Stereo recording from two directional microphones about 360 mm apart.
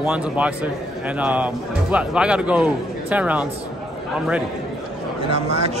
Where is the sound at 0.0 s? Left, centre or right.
Centre.